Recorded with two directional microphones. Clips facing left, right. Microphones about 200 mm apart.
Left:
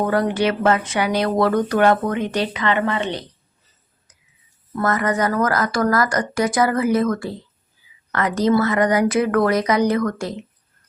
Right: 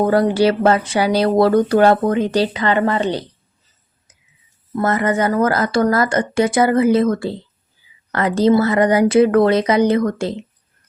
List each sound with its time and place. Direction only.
0.0 s speech: 30° right (ahead or behind)
4.7 s a woman's voice: 25° right (ahead or behind)